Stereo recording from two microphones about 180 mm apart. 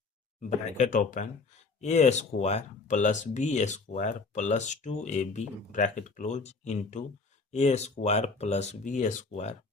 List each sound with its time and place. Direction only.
0.3 s speech: 45° left (ahead or behind)